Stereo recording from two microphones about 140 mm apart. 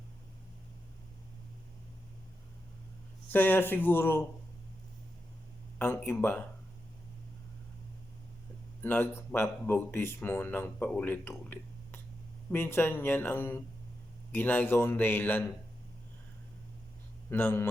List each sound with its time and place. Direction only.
3.3 s speech: 15° left (ahead or behind)
5.8 s speech: 15° left (ahead or behind)
8.8 s speech: 15° left (ahead or behind)
17.2 s a man's voice: 15° left (ahead or behind)